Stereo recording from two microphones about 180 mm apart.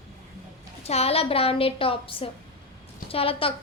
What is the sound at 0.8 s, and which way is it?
A woman's voice, 35° left (ahead or behind).